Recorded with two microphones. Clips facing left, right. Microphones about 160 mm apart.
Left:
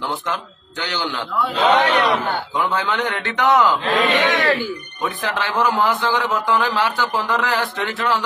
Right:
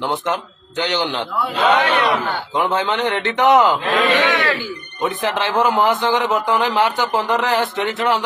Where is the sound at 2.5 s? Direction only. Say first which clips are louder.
Right 4 dB; 20° right (ahead or behind).